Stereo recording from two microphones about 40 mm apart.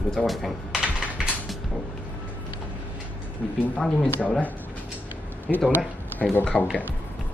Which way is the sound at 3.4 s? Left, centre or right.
Centre.